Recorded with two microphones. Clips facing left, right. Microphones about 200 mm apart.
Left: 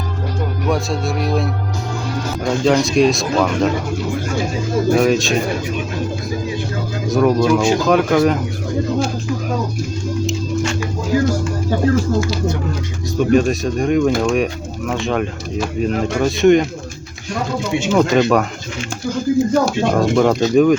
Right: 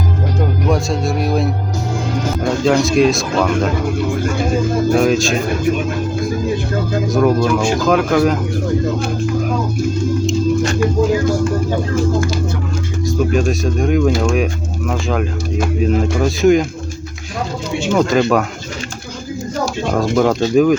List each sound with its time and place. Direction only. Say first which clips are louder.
0.7 s speech: even; centre (ahead or behind)
2.6 s speech: right 1 dB; centre (ahead or behind)
4.9 s speech: even; centre (ahead or behind)
7.1 s speech: left 1 dB; centre (ahead or behind)
13.1 s speech: left 3 dB; centre (ahead or behind)
17.9 s speech: even; centre (ahead or behind)
20.0 s speech: right 1 dB; centre (ahead or behind)